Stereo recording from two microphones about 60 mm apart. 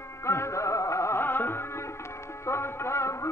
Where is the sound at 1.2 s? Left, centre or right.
Left.